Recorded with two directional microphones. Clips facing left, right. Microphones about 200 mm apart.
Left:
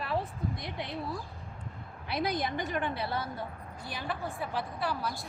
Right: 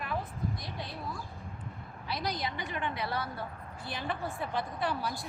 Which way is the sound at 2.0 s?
55° left (ahead or behind).